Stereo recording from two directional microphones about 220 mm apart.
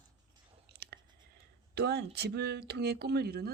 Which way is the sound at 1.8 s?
45° right (ahead or behind).